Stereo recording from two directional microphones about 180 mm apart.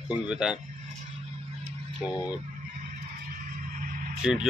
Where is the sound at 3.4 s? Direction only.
50° right (ahead or behind).